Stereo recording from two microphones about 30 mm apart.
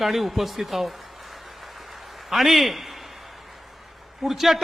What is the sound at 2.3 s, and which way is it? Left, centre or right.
Speech, centre.